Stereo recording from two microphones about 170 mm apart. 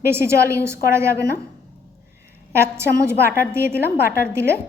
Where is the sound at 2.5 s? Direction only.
15° right (ahead or behind).